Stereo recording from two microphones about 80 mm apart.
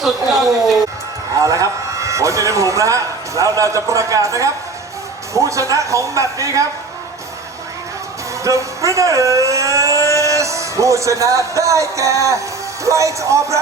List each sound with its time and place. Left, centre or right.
0.0 s a woman's voice: centre
1.4 s a man's voice: right
8.4 s speech: right